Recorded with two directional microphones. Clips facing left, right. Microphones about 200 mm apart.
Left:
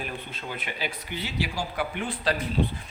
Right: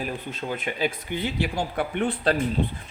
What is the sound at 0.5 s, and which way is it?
Speech, 50° right (ahead or behind).